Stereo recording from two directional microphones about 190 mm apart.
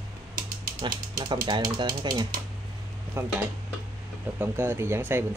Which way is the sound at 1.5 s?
25° right (ahead or behind).